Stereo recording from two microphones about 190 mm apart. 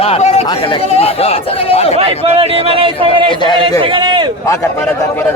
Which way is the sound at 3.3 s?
25° left (ahead or behind).